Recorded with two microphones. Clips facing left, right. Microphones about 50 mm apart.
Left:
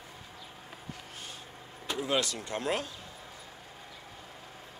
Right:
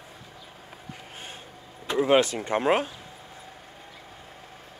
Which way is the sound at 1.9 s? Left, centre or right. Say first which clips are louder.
Right 10 dB; right.